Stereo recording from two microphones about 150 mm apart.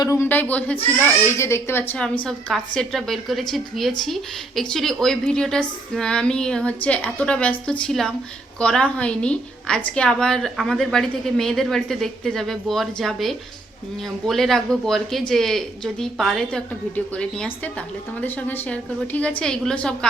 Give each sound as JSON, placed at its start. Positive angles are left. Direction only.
{"t": 0.0, "sound": "a woman's voice", "side_deg": 20}